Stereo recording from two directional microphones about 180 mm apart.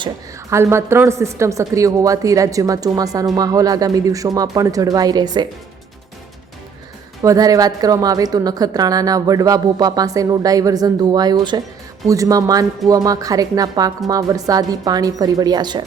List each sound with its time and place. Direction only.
0.5 s a woman's voice: 15° right (ahead or behind)
7.2 s a woman's voice: 20° right (ahead or behind)